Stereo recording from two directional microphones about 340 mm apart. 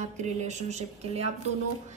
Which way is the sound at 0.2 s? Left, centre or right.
Right.